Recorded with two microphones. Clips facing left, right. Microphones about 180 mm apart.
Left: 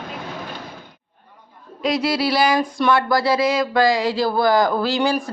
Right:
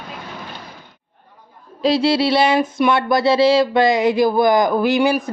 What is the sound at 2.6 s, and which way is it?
Speech, 10° right (ahead or behind).